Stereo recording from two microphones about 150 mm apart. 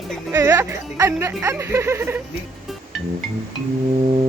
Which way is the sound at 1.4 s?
20° right (ahead or behind).